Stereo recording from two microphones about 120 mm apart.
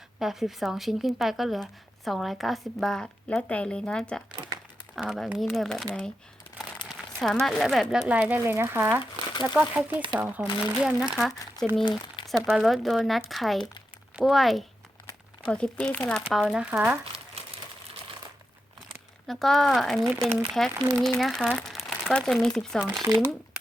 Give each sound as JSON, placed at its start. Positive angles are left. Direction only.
{"t": 0.2, "sound": "speech", "side_deg": 0}
{"t": 4.3, "sound": "speech", "side_deg": -35}
{"t": 4.9, "sound": "speech", "side_deg": 0}
{"t": 6.8, "sound": "crumpling", "side_deg": 40}
{"t": 7.2, "sound": "speech", "side_deg": 5}
{"t": 8.1, "sound": "speech", "side_deg": -15}
{"t": 9.3, "sound": "speech", "side_deg": 40}
{"t": 9.6, "sound": "speech", "side_deg": -15}
{"t": 10.8, "sound": "speech", "side_deg": -5}
{"t": 16.2, "sound": "speech", "side_deg": 0}
{"t": 16.7, "sound": "speech", "side_deg": -15}
{"t": 19.3, "sound": "speech", "side_deg": 0}
{"t": 23.0, "sound": "speech", "side_deg": -20}